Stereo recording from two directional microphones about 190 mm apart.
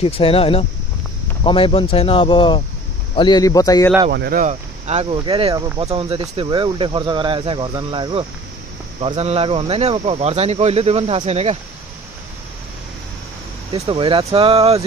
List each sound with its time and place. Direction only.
0.0 s speech: 30° left (ahead or behind)
4.1 s speech: 55° right (ahead or behind); by 5.0 s 40° right (ahead or behind)
5.1 s speech: 25° right (ahead or behind)
5.9 s speech: 30° right (ahead or behind)
13.7 s speech: 25° right (ahead or behind)